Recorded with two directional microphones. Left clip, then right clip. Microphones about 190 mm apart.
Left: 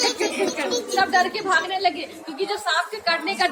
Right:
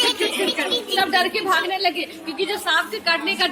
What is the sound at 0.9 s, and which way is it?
A woman's voice, 50° right (ahead or behind).